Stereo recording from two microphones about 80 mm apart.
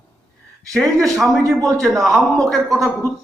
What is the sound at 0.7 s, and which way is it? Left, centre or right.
A man's voice, centre.